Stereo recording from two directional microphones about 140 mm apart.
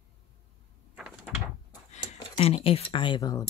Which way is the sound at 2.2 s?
45° left (ahead or behind).